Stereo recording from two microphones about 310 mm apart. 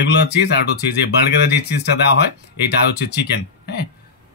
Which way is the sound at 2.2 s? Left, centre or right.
Left.